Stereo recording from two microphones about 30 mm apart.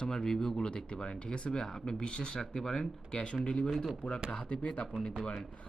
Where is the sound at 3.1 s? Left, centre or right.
Left.